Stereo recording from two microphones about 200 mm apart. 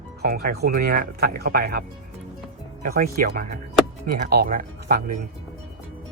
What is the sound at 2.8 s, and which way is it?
Speech, 45° right (ahead or behind).